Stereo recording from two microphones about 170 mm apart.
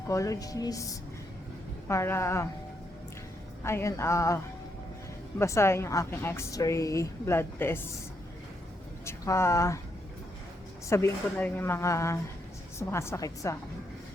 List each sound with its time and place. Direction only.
0.1 s a woman's voice: 20° left (ahead or behind)
3.6 s a woman's voice: 15° left (ahead or behind)
5.4 s a woman's voice: 15° left (ahead or behind)
9.0 s speech: 15° left (ahead or behind)
10.8 s a woman's voice: 15° left (ahead or behind)